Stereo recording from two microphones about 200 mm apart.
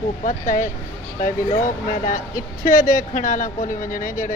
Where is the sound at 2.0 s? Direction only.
45° left (ahead or behind).